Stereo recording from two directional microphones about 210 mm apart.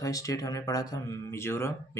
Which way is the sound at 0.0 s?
15° left (ahead or behind).